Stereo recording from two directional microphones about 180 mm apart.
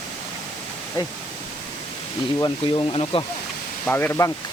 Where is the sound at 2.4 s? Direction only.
25° left (ahead or behind).